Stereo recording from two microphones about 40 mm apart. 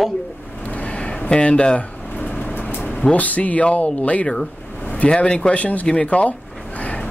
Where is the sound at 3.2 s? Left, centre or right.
Left.